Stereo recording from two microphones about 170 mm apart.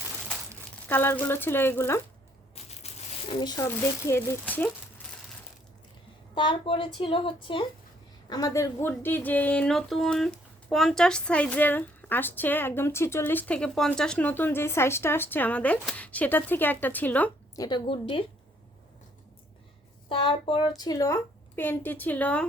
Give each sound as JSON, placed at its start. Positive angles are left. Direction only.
{"t": 0.9, "sound": "speech", "side_deg": 10}
{"t": 2.6, "sound": "crushing", "side_deg": 40}
{"t": 3.4, "sound": "speech", "side_deg": 20}
{"t": 6.3, "sound": "a woman's voice", "side_deg": 30}
{"t": 17.6, "sound": "a woman's voice", "side_deg": 30}
{"t": 20.1, "sound": "speech", "side_deg": 30}